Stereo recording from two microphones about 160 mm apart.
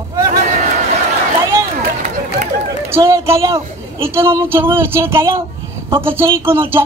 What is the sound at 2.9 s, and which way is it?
A man's voice, 20° right (ahead or behind).